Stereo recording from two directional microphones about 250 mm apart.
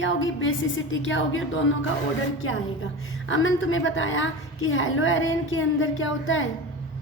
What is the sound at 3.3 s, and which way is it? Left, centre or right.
A woman's voice, left.